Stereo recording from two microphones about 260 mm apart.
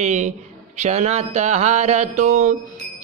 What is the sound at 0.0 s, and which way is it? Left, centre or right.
Speech, right.